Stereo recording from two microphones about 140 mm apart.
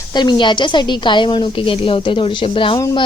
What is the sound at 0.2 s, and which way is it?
Speech, 35° left (ahead or behind).